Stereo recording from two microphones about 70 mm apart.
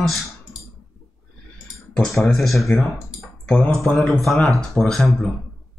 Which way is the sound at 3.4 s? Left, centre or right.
Centre.